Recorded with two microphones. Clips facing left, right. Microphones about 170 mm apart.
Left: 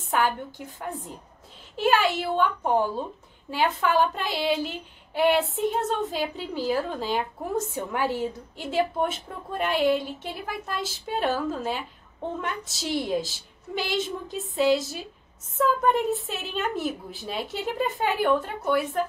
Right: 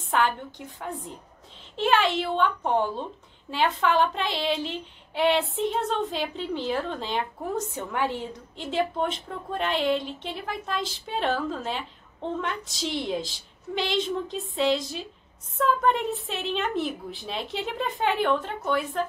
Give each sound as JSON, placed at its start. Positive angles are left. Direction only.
{"t": 0.1, "sound": "a woman's voice", "side_deg": 5}